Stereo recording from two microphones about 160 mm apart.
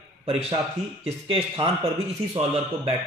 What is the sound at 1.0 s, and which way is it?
Speech, 40° right (ahead or behind).